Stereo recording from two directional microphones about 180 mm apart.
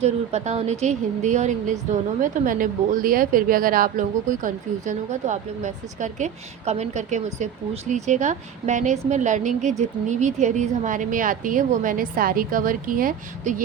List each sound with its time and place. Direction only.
0.0 s a woman's voice: 35° right (ahead or behind)